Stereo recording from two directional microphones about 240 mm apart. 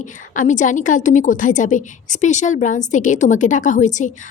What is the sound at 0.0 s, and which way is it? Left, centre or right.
A woman's voice, left.